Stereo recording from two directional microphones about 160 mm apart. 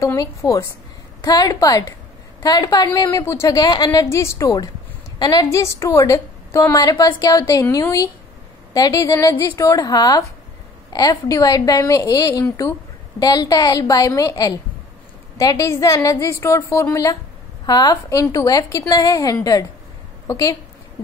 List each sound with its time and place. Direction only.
0.0 s a woman's voice: 20° left (ahead or behind)